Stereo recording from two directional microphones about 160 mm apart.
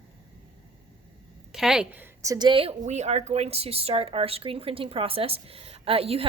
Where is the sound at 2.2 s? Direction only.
25° right (ahead or behind).